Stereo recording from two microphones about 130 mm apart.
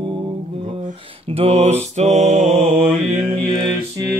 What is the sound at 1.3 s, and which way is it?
Mantra, 50° right (ahead or behind).